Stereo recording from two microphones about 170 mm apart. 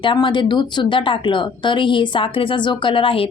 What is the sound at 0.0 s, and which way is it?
A woman's voice, 30° left (ahead or behind).